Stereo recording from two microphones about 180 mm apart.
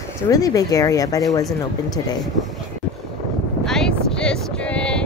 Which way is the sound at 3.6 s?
5° left (ahead or behind).